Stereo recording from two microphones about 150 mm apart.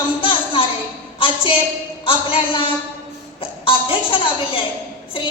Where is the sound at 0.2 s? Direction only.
35° left (ahead or behind).